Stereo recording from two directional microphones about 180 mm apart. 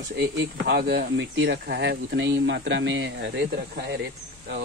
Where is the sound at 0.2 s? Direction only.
60° right (ahead or behind); by 3.4 s 80° right.